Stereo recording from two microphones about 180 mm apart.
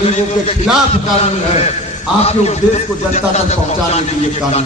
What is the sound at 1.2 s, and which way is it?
A man's voice, 40° left (ahead or behind).